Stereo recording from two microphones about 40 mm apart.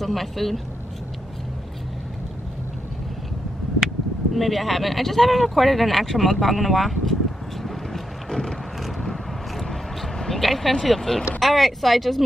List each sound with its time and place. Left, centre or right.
0.0 s speech: centre
4.3 s speech: centre
7.6 s vehicle: centre
11.3 s speech: centre